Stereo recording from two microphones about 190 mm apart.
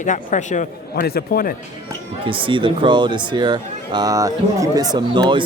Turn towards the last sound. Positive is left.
turn(degrees=-25)  # may be behind; listen again after turning